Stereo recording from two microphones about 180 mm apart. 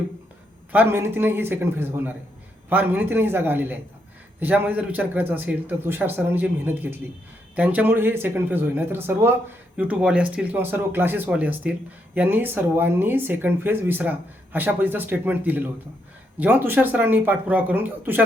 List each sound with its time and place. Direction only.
0.7 s speech: 10° right (ahead or behind)